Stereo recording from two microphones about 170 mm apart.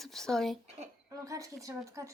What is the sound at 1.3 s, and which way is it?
Speech, 20° right (ahead or behind).